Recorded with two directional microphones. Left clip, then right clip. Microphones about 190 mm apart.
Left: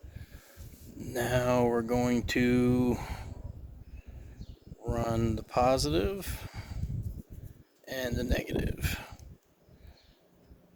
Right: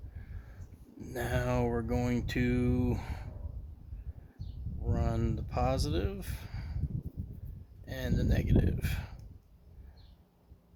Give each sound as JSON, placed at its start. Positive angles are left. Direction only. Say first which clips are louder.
{"t": 1.1, "sound": "speech", "louder": "left 6 dB", "side_deg": 15}
{"t": 2.2, "sound": "speech", "louder": "left 5 dB", "side_deg": 25}
{"t": 2.9, "sound": "speech", "louder": "left 5 dB", "side_deg": 10}
{"t": 5.1, "sound": "speech", "louder": "left 6 dB", "side_deg": 15}
{"t": 7.9, "sound": "speech", "louder": "left 4 dB", "side_deg": 20}